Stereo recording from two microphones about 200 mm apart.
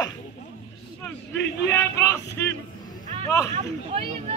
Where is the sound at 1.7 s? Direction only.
10° left (ahead or behind).